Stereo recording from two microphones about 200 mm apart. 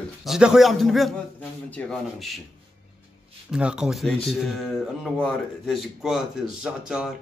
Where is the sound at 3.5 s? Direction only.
5° right (ahead or behind).